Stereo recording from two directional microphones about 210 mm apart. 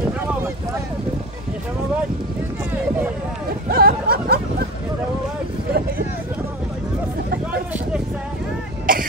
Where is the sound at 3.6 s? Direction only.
45° right (ahead or behind).